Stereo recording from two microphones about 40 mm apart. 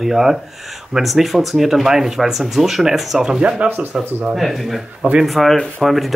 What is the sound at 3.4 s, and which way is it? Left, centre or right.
Speech, right.